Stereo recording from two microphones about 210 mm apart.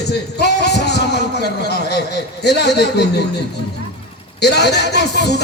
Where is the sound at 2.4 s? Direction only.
50° left (ahead or behind).